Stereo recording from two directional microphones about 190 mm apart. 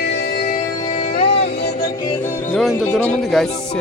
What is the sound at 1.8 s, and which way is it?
Music, 25° left (ahead or behind).